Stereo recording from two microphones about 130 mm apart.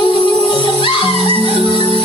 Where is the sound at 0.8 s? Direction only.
40° left (ahead or behind).